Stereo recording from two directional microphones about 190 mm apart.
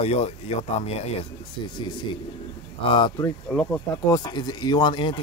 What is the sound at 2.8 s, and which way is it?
Speech, 25° left (ahead or behind).